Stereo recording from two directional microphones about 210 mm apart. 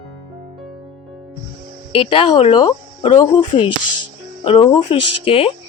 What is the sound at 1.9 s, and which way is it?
Speech, 25° left (ahead or behind).